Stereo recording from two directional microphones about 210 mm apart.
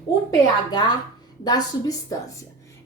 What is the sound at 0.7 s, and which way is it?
A woman's voice, 20° left (ahead or behind).